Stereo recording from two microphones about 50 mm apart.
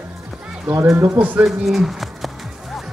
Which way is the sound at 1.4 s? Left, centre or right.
Centre.